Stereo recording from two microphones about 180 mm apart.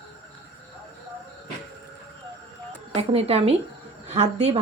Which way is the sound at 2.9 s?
35° right (ahead or behind).